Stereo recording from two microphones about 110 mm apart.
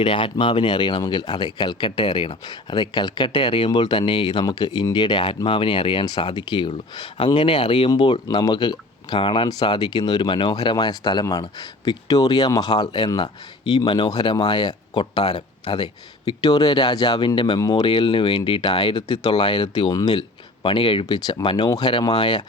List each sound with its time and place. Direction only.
0.0 s speech: 45° left (ahead or behind)
17.8 s speech: 50° left (ahead or behind)
21.2 s speech: 40° left (ahead or behind)